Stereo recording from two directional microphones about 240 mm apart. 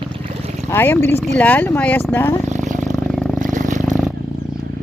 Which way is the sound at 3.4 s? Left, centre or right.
Right.